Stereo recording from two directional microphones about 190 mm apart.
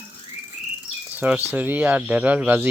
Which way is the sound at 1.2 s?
10° right (ahead or behind).